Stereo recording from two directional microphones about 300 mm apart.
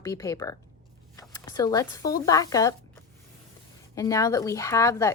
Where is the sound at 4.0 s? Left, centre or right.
Centre.